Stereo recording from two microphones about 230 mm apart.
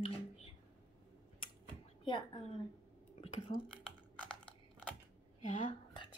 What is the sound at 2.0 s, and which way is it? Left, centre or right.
Speech, left.